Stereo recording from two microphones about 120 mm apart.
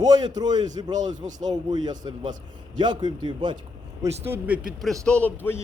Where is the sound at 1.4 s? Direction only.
35° right (ahead or behind).